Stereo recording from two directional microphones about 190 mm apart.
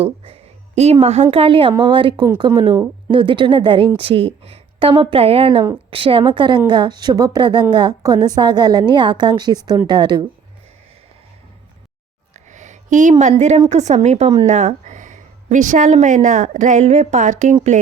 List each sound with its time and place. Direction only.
0.8 s a woman's voice: 35° right (ahead or behind)
12.3 s a sound: 40° right (ahead or behind)
13.4 s a woman's voice: 35° right (ahead or behind)